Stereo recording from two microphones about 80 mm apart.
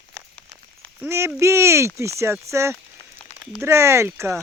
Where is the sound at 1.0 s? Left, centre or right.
Right.